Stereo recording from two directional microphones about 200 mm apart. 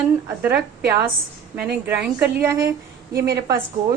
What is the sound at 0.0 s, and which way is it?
Speech, 5° right (ahead or behind).